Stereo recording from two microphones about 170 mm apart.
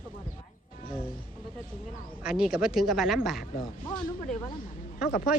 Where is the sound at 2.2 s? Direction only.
5° right (ahead or behind).